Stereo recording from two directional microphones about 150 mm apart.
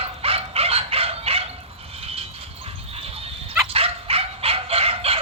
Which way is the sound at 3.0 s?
40° right (ahead or behind).